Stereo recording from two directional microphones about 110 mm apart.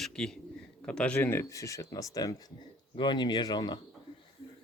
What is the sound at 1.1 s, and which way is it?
Speech, 20° left (ahead or behind).